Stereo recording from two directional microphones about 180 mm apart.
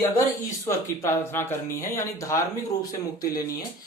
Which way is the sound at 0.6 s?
15° left (ahead or behind).